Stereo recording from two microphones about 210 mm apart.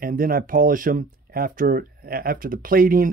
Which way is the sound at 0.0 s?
45° right (ahead or behind).